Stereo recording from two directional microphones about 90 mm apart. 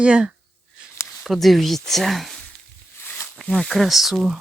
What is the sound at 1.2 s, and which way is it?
Speech, centre (ahead or behind).